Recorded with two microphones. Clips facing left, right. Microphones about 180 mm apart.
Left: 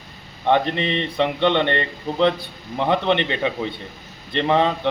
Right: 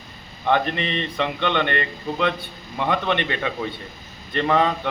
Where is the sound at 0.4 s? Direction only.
25° left (ahead or behind).